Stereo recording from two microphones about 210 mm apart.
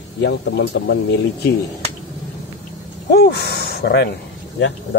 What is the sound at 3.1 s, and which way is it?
Speech, 50° left (ahead or behind).